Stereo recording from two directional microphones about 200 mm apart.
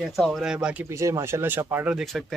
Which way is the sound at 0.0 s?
Centre (ahead or behind).